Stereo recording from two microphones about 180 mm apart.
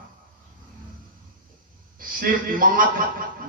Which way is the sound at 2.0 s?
50° right (ahead or behind).